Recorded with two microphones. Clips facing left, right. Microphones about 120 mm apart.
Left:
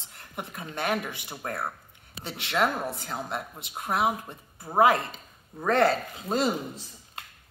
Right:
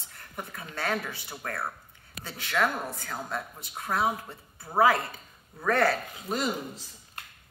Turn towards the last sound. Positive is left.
turn(degrees=30)  # may be behind; listen again after turning